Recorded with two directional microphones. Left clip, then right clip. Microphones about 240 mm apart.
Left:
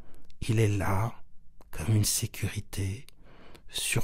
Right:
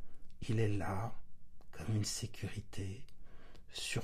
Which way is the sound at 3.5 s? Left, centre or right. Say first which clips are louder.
Left 10 dB; left.